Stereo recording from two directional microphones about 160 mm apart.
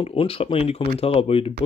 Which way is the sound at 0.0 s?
35° left (ahead or behind).